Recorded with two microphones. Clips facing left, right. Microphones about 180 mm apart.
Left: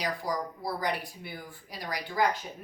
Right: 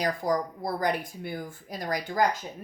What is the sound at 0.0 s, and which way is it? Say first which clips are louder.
Speech: right 5 dB; 50° right (ahead or behind).